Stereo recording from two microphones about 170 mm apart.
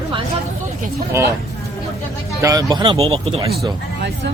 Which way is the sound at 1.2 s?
15° right (ahead or behind).